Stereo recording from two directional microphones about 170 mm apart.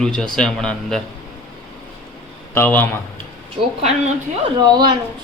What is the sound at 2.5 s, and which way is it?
Speech, 10° left (ahead or behind).